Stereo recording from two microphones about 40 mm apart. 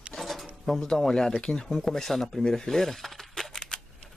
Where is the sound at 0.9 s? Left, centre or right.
Centre.